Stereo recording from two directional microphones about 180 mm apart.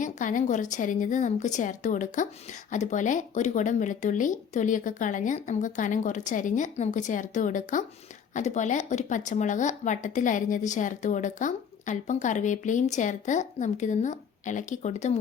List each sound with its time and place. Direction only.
0.0 s speech: 45° left (ahead or behind)